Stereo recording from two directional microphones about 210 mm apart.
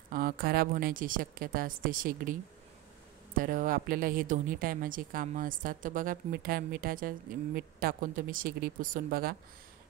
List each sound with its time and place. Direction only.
0.1 s a woman's voice: 45° right (ahead or behind)
3.3 s a woman's voice: 40° right (ahead or behind)